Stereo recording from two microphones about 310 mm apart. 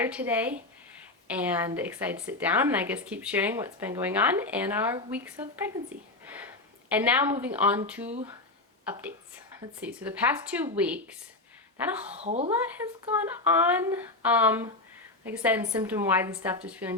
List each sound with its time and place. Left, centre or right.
0.0 s a woman's voice: centre
12.1 s a woman's voice: right
13.6 s a woman's voice: centre